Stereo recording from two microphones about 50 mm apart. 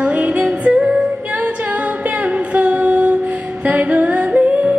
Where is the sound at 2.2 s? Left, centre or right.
Right.